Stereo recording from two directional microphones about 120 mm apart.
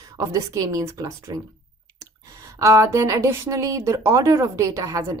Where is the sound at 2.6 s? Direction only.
25° right (ahead or behind).